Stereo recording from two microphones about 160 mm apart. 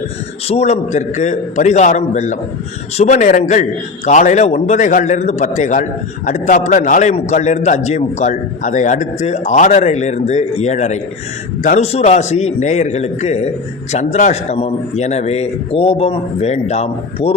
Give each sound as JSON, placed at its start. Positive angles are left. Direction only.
{"t": 0.4, "sound": "a man's voice", "side_deg": 40}